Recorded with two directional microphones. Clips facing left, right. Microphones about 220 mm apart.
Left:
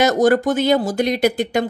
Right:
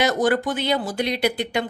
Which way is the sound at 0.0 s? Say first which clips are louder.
Left 5 dB; 45° left (ahead or behind).